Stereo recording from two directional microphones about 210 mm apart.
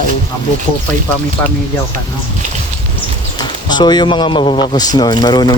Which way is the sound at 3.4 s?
20° left (ahead or behind).